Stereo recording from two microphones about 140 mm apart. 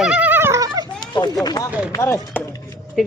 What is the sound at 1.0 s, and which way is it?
Run, 30° left (ahead or behind).